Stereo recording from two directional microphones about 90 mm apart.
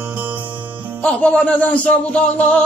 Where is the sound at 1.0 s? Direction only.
10° left (ahead or behind).